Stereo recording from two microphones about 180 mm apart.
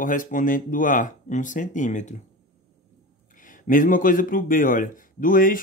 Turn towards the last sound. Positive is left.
turn(degrees=50)  # may be behind; listen again after turning